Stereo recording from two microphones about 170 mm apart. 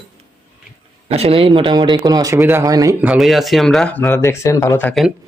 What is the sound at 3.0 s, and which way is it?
Speech, 5° right (ahead or behind).